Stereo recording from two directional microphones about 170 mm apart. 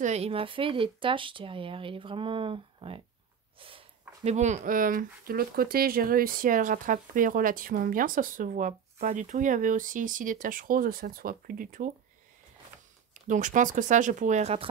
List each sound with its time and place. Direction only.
0.0 s speech: 40° right (ahead or behind)
13.3 s speech: 45° right (ahead or behind)